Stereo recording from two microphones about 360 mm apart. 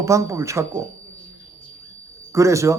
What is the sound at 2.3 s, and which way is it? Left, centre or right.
Speech, centre.